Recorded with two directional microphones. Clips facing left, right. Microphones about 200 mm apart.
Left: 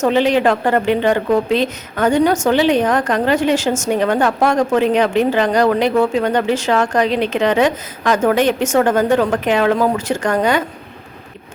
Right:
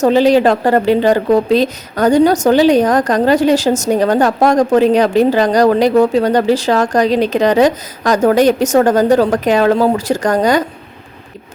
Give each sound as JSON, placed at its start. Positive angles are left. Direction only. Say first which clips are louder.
{"t": 0.0, "sound": "speech", "louder": "right 4 dB", "side_deg": -35}